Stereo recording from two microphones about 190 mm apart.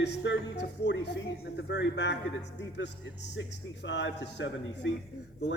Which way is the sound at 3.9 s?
65° left (ahead or behind).